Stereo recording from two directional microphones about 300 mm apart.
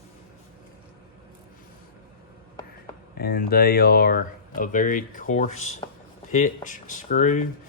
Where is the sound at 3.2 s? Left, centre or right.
Left.